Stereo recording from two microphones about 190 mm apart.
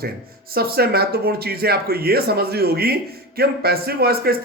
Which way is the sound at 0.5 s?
55° right (ahead or behind).